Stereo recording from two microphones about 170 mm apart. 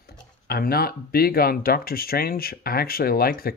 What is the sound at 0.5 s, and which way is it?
Speech, 60° left (ahead or behind).